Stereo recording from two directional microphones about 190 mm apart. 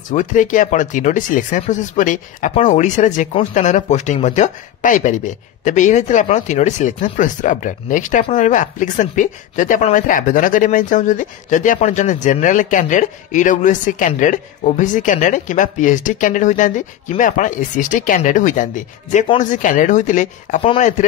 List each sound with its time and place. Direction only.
0.1 s speech: 40° left (ahead or behind)
20.6 s speech: 30° left (ahead or behind)